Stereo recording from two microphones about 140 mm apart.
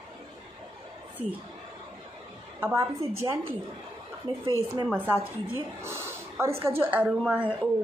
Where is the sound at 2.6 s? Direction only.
20° right (ahead or behind).